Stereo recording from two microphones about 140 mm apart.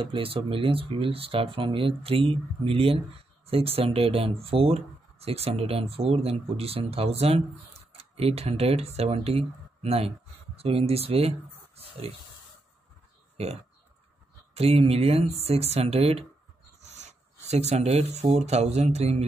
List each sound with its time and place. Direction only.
0.0 s speech: 40° right (ahead or behind)
14.5 s speech: 45° right (ahead or behind)